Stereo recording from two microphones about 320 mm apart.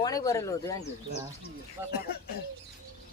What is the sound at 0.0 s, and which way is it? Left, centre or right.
Speech, centre.